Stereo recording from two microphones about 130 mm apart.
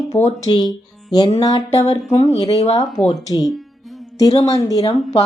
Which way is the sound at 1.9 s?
50° left (ahead or behind).